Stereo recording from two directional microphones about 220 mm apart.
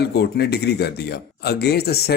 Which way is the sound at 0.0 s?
50° left (ahead or behind).